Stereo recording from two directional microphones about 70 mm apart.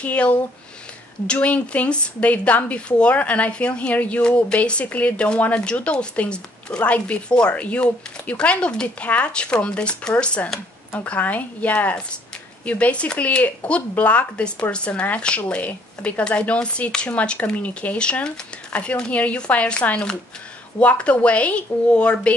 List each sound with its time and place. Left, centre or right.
0.0 s a woman's voice: centre